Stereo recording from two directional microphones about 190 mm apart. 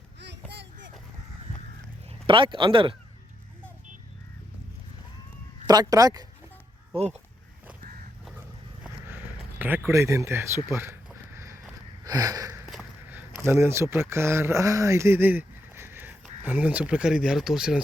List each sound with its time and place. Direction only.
0.2 s a sound: 65° right (ahead or behind)
2.2 s speech: 25° right (ahead or behind)
5.6 s speech: 20° right (ahead or behind)
6.9 s speech: 35° right (ahead or behind)
8.8 s speech: 10° right (ahead or behind)
12.0 s sniff: 20° right (ahead or behind)
12.6 s a sound: 5° right (ahead or behind)
16.4 s speech: 10° right (ahead or behind)